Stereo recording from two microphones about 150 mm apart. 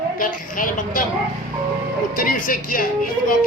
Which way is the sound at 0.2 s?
65° left (ahead or behind).